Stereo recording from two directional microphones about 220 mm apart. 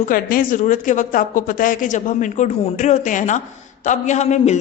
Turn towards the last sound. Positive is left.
turn(degrees=30)  # may be behind; listen again after turning